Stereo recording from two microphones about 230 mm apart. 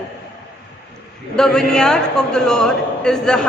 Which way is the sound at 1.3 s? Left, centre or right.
Centre.